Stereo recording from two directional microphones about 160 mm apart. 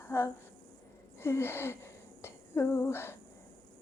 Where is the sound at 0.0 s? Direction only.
15° left (ahead or behind).